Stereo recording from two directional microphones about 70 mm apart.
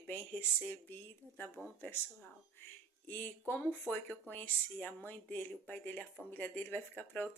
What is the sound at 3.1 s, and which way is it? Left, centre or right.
Speech, left.